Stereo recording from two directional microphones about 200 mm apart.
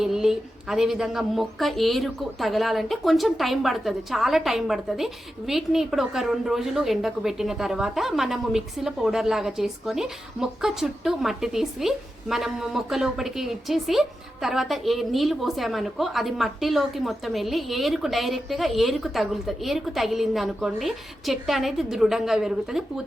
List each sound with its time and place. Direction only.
0.0 s speech: centre (ahead or behind)